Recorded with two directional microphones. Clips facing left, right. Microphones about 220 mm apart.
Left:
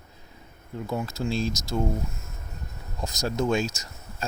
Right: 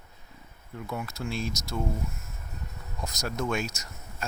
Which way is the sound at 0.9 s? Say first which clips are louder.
Left 5 dB; 25° left (ahead or behind).